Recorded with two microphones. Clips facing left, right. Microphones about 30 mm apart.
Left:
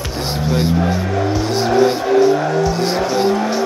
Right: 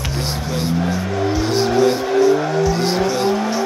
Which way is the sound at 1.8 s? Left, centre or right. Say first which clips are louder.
Left 3 dB; centre.